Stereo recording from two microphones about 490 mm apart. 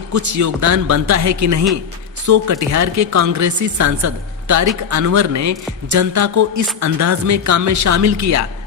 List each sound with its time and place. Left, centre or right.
0.1 s a woman's voice: right